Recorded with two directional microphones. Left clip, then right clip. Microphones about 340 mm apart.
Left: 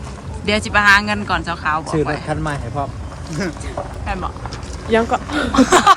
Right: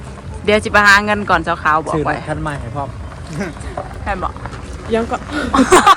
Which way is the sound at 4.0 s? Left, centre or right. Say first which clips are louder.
Right 7 dB; centre.